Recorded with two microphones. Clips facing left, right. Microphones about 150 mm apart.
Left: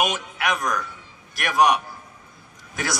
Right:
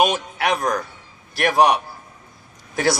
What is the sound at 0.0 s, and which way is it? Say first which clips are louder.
A man's voice: right 5 dB; 35° right (ahead or behind).